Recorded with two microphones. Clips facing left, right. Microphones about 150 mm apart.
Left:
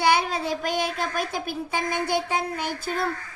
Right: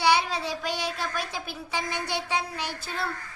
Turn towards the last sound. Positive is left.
turn(degrees=50)  # may be behind; listen again after turning